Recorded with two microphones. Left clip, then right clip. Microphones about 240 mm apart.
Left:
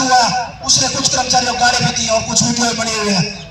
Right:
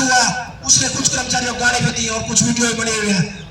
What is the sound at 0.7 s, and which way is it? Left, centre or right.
Music, centre.